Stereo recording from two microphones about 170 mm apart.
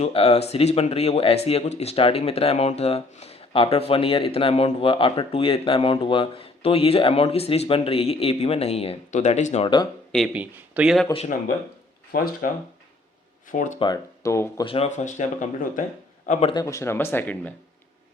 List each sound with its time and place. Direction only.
0.0 s speech: 35° left (ahead or behind)
10.3 s speech: 10° right (ahead or behind)
12.1 s speech: 60° left (ahead or behind)
13.5 s speech: 50° left (ahead or behind)
13.7 s speech: 25° left (ahead or behind)
14.6 s speech: 35° left (ahead or behind)
16.5 s speech: 20° left (ahead or behind)